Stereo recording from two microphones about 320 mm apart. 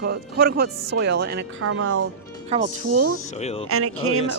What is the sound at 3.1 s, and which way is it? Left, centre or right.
Speech, centre.